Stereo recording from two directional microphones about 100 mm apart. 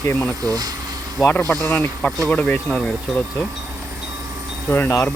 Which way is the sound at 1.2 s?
25° left (ahead or behind).